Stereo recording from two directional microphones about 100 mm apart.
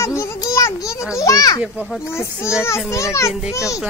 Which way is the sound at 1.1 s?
35° left (ahead or behind).